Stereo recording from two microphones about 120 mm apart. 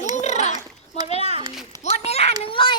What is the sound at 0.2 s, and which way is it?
Children playing, 75° left (ahead or behind).